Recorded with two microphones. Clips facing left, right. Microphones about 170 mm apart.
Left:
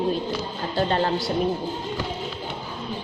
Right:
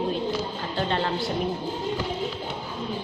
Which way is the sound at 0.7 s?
40° left (ahead or behind).